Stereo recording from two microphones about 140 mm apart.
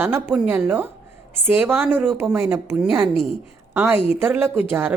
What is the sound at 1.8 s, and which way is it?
Speech, 5° left (ahead or behind).